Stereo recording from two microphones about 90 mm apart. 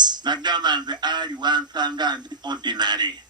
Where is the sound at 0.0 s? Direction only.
55° right (ahead or behind).